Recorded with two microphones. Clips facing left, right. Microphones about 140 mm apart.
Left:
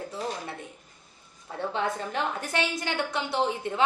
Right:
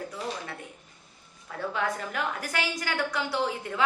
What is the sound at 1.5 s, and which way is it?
A woman's voice, 25° left (ahead or behind).